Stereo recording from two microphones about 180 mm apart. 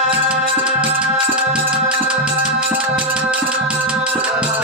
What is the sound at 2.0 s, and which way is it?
Music, 5° right (ahead or behind).